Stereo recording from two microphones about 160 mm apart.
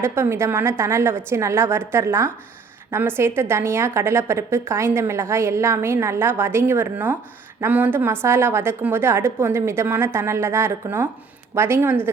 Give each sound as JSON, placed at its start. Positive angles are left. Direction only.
{"t": 0.0, "sound": "a woman's voice", "side_deg": -15}